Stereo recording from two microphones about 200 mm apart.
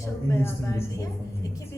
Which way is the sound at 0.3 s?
15° left (ahead or behind).